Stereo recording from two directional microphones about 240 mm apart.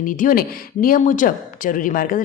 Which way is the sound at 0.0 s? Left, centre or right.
Left.